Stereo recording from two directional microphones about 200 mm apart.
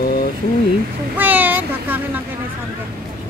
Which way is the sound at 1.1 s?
10° right (ahead or behind).